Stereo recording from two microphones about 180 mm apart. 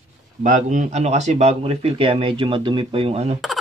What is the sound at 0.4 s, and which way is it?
Speech, 45° right (ahead or behind).